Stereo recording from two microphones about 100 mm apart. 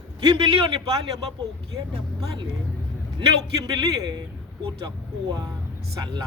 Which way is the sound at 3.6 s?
40° right (ahead or behind).